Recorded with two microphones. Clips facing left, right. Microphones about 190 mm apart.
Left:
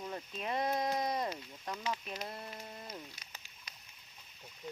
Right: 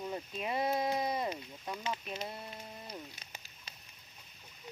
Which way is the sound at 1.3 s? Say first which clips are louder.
Right 1 dB; 20° right (ahead or behind).